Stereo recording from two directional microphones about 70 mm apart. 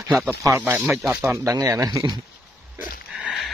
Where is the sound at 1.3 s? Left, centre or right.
Right.